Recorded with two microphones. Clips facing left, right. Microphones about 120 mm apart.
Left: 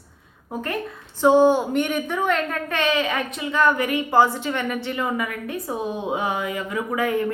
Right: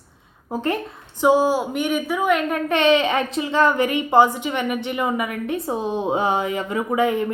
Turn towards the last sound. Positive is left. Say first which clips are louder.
# right 3 dB
turn(degrees=-20)  # may be behind; listen again after turning